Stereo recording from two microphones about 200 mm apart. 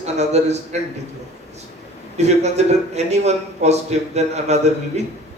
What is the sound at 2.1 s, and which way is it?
A man's voice, 35° right (ahead or behind).